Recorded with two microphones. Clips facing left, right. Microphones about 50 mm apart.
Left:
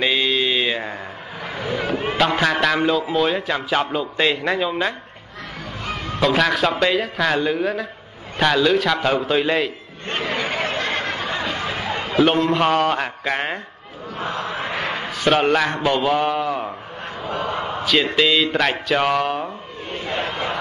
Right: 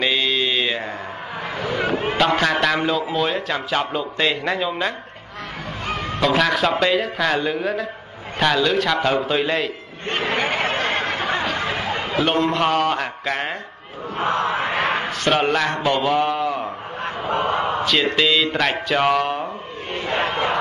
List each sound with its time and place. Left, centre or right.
0.0 s mantra: centre
1.5 s vehicle: right
2.1 s speech: centre
5.9 s music: right
6.1 s speech: centre
10.0 s a sound: right
12.2 s speech: centre
14.1 s a sound: right
15.0 s speech: centre
17.0 s a sound: right
18.1 s speech: centre
19.9 s crowd: right